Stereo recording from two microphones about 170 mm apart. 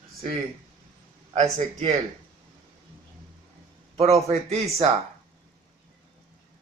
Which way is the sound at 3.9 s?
40° right (ahead or behind).